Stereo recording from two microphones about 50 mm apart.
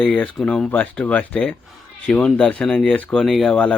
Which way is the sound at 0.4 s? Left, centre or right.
Left.